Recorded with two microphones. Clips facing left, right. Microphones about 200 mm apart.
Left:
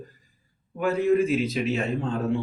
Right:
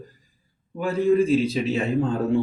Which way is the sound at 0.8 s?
30° right (ahead or behind).